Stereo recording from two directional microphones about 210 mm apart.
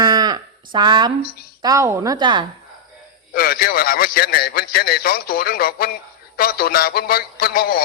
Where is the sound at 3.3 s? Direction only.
45° left (ahead or behind).